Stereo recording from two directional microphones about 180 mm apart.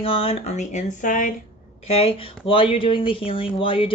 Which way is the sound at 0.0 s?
30° left (ahead or behind).